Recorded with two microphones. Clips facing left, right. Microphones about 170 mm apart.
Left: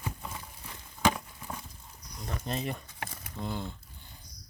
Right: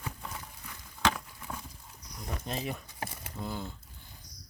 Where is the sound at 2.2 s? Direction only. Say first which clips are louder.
Left 2 dB; centre (ahead or behind).